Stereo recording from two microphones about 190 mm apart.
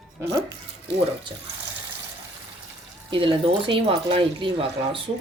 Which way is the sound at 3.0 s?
25° right (ahead or behind).